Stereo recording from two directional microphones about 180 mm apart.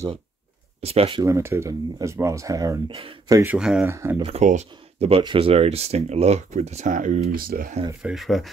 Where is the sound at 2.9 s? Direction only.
30° right (ahead or behind).